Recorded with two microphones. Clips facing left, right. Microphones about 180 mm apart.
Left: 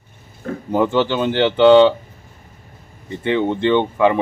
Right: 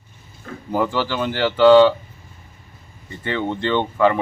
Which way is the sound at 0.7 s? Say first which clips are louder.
Left 4 dB; 20° left (ahead or behind).